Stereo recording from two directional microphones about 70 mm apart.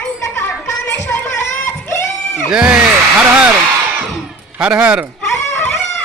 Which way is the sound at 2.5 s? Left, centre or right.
Centre.